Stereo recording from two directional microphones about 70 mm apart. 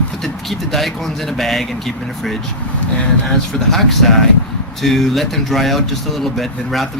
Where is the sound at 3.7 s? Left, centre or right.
Centre.